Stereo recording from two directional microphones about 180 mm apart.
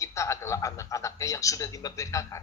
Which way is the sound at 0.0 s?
15° left (ahead or behind).